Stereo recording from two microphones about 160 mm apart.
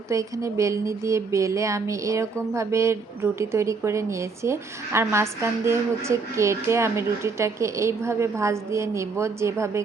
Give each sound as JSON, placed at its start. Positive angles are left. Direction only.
{"t": 0.1, "sound": "speech", "side_deg": -20}